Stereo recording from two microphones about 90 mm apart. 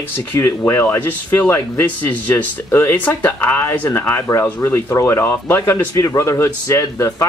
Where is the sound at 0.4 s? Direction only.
30° left (ahead or behind).